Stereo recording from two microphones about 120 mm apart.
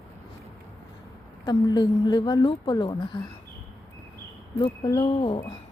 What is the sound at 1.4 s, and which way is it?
Speech, 35° left (ahead or behind).